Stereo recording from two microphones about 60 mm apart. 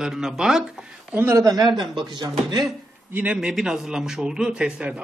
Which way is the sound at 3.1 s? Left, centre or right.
Centre.